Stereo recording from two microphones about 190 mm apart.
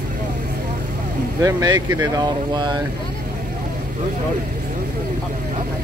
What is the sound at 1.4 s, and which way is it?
Speech, 20° right (ahead or behind).